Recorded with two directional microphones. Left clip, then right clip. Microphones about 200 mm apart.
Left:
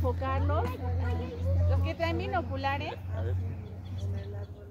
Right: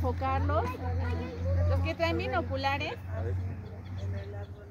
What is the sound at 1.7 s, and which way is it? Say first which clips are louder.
Speech: right 2 dB; 55° right (ahead or behind).